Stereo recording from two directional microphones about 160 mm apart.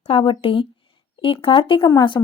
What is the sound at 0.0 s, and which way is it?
A woman's voice, 35° left (ahead or behind).